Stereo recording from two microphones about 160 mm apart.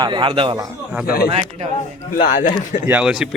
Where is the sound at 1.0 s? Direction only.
70° left (ahead or behind).